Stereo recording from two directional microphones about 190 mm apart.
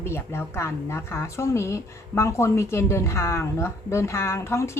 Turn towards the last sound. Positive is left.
turn(degrees=15)  # may be behind; listen again after turning